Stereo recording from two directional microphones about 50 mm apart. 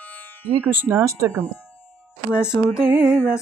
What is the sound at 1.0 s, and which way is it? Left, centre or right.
Speech, right.